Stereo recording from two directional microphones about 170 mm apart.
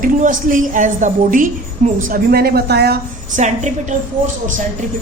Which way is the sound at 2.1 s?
65° right (ahead or behind).